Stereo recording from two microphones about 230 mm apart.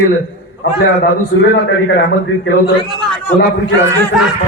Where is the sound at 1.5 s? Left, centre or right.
Left.